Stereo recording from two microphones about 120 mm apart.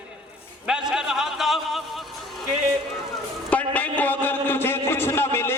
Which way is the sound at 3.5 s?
10° left (ahead or behind).